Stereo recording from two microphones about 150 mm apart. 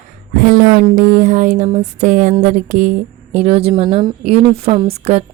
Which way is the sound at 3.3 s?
45° right (ahead or behind).